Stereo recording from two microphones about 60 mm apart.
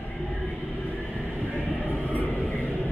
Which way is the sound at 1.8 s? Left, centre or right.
Left.